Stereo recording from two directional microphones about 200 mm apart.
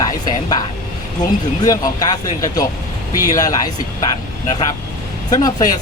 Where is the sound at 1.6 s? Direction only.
20° left (ahead or behind).